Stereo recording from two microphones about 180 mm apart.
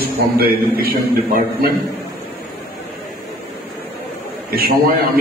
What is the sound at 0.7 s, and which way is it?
Speech, 55° right (ahead or behind).